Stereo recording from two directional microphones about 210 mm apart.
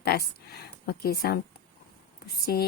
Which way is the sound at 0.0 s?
50° left (ahead or behind).